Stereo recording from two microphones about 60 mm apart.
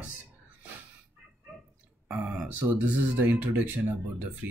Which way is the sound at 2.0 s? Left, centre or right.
Right.